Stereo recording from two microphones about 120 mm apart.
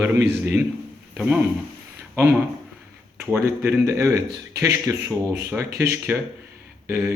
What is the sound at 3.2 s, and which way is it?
A man's voice, 20° right (ahead or behind).